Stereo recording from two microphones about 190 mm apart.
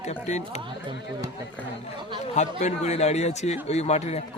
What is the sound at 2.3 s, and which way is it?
A man's voice, 35° left (ahead or behind).